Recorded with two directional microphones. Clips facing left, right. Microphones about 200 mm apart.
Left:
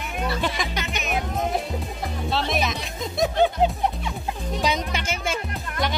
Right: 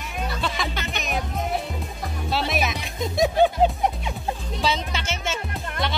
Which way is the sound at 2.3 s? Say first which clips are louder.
Even; 5° right (ahead or behind).